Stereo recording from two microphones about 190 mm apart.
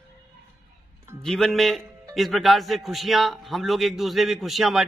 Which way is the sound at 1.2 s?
Centre (ahead or behind).